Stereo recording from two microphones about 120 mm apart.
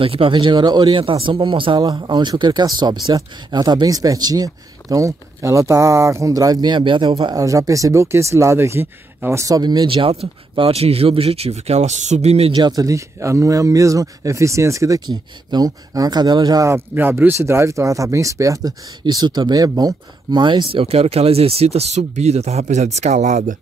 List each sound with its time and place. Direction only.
0.0 s speech: 50° right (ahead or behind)
7.3 s speech: 25° right (ahead or behind)
10.0 s speech: 50° right (ahead or behind)
12.5 s speech: 35° right (ahead or behind)
16.6 s speech: 20° right (ahead or behind); by 23.4 s 85° right